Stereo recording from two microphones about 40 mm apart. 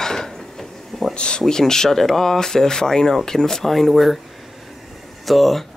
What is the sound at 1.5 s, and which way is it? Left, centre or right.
Speech, centre.